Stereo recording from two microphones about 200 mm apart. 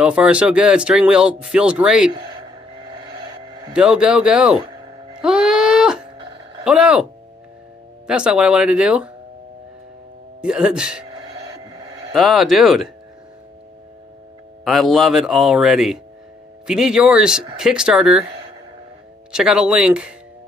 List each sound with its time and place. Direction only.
0.0 s speech: 5° right (ahead or behind)
2.1 s music: 20° right (ahead or behind)
3.1 s a sound: 20° right (ahead or behind)
3.7 s speech: 5° right (ahead or behind)
5.2 s wail: 5° right (ahead or behind)
6.6 s speech: 5° right (ahead or behind)
8.1 s speech: 5° right (ahead or behind)
10.4 s speech: 5° right (ahead or behind)
12.1 s speech: centre (ahead or behind)
14.6 s speech: centre (ahead or behind)
19.3 s speech: 5° right (ahead or behind)